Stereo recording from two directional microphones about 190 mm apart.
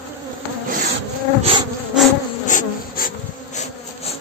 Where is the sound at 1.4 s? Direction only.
30° right (ahead or behind).